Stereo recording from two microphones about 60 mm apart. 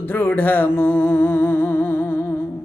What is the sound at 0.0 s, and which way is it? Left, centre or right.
Music, left.